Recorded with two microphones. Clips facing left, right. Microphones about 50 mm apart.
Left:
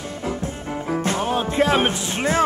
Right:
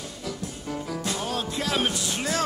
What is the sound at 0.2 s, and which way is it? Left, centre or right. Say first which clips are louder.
Music: left 7 dB; left.